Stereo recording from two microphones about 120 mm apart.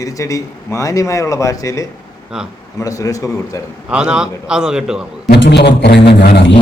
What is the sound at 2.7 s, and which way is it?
Speech, 30° left (ahead or behind).